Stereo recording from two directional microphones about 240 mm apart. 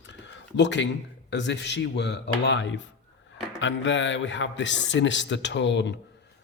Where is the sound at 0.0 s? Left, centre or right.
Left.